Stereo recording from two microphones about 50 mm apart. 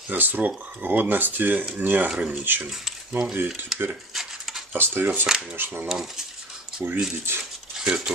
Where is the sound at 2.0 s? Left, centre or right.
Right.